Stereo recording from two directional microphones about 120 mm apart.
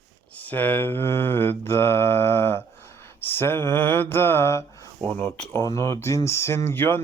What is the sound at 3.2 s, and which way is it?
Speech, 20° left (ahead or behind).